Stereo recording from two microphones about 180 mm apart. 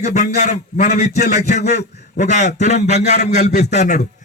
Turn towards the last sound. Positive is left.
turn(degrees=40)  # may be behind; listen again after turning